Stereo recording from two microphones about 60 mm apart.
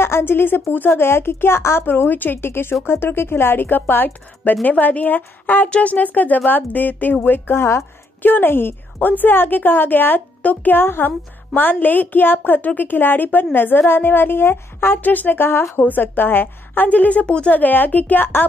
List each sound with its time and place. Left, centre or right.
0.0 s a woman's voice: left